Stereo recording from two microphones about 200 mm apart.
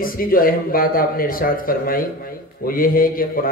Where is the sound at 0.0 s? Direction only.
45° left (ahead or behind).